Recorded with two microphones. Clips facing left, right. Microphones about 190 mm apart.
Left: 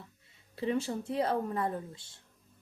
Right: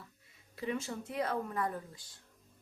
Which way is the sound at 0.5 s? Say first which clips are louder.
Left 5 dB; 30° left (ahead or behind).